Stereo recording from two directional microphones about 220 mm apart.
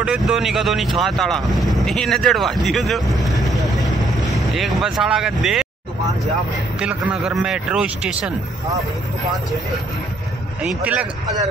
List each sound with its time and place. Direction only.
0.0 s speech: 5° right (ahead or behind)
6.8 s speech: 5° right (ahead or behind)
10.6 s speech: 5° right (ahead or behind)